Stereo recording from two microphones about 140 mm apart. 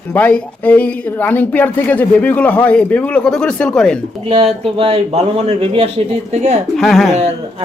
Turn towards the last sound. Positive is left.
turn(degrees=0)  # may be behind; listen again after turning